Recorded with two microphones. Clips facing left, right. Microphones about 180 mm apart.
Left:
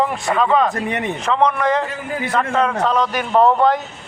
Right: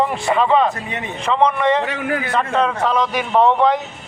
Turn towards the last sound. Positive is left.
turn(degrees=0)  # may be behind; listen again after turning